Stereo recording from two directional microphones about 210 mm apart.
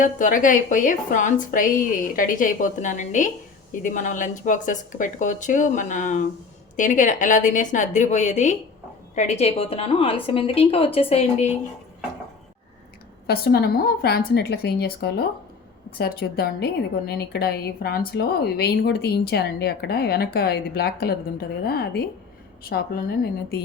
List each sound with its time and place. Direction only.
0.0 s a woman's voice: 40° left (ahead or behind)
13.2 s speech: 45° left (ahead or behind)